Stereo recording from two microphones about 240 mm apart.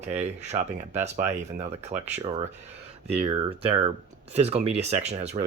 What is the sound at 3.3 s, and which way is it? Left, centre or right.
Speech, right.